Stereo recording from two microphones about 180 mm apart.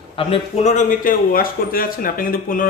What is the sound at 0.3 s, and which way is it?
Speech, 40° left (ahead or behind).